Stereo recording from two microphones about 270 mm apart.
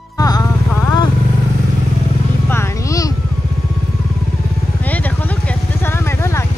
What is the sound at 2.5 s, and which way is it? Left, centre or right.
Vehicle, centre.